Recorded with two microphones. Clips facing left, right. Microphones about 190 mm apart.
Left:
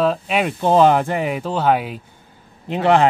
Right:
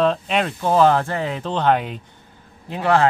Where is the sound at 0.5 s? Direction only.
20° left (ahead or behind).